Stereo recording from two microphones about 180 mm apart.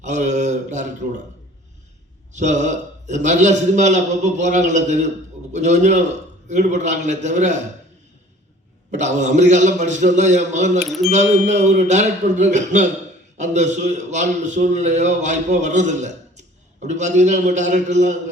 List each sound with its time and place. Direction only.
0.0 s speech: 40° right (ahead or behind)
2.3 s a man's voice: 40° right (ahead or behind)
8.9 s a man's voice: 40° right (ahead or behind)